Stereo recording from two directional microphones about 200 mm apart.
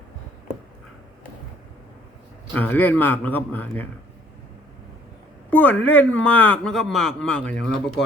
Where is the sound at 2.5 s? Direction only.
10° left (ahead or behind).